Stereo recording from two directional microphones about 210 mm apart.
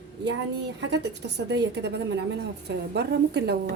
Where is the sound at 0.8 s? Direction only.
55° right (ahead or behind).